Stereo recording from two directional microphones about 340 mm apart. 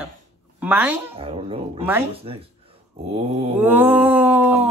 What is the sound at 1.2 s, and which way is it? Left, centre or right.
Speech, centre.